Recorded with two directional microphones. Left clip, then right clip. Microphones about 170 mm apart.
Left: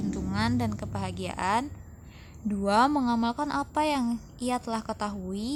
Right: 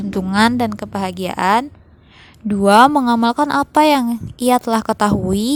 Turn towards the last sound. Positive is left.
turn(degrees=-50)  # may be behind; listen again after turning